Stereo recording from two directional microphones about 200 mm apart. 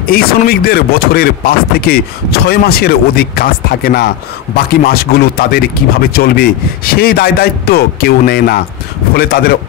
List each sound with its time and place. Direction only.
0.0 s speech: 50° left (ahead or behind)